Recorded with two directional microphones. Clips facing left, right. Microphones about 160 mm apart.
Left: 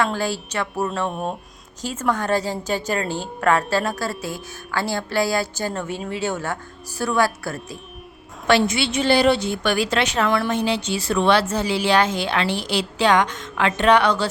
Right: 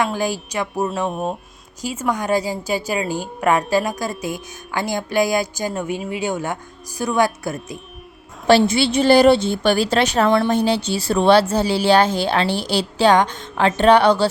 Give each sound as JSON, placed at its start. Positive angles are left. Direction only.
{"t": 0.0, "sound": "a woman's voice", "side_deg": -15}
{"t": 8.4, "sound": "speech", "side_deg": -30}
{"t": 9.4, "sound": "speech", "side_deg": -30}